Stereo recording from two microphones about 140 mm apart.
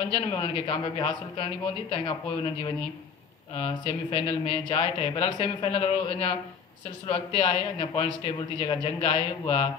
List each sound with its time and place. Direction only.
0.1 s a man's voice: 40° left (ahead or behind)